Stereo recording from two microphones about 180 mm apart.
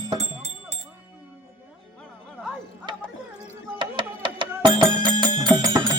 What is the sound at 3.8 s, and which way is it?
Music, 25° right (ahead or behind).